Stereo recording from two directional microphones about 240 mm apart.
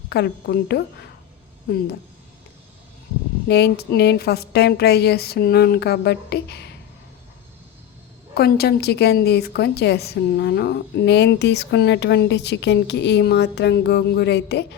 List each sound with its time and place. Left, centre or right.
0.1 s a woman's voice: left
3.5 s a woman's voice: left
8.4 s a woman's voice: left